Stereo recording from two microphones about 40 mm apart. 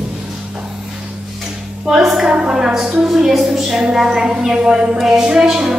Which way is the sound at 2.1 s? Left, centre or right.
Centre.